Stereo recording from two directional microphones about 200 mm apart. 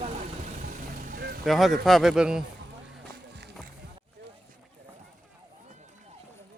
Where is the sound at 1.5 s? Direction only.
Centre (ahead or behind).